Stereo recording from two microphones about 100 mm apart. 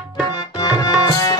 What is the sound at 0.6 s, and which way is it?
Music, 35° left (ahead or behind).